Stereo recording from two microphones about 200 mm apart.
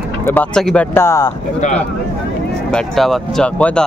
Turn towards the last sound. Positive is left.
turn(degrees=5)  # may be behind; listen again after turning